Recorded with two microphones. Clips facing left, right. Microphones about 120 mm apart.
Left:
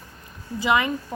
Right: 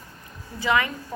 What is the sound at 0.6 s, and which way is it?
Speech, 20° left (ahead or behind).